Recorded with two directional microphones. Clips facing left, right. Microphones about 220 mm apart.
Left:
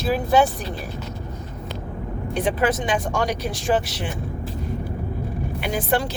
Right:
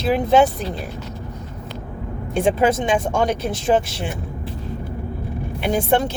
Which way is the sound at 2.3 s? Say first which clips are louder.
Right 4 dB; 25° right (ahead or behind).